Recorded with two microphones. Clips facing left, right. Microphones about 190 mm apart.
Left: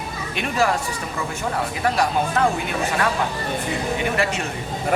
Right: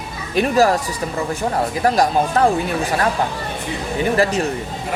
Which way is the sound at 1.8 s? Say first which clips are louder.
Right 4 dB; 40° right (ahead or behind).